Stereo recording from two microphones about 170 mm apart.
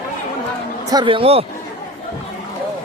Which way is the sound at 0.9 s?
25° right (ahead or behind).